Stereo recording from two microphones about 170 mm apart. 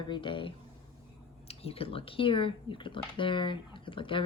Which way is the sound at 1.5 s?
35° left (ahead or behind).